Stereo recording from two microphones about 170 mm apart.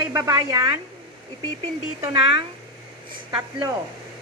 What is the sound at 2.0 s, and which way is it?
Speech, 25° right (ahead or behind).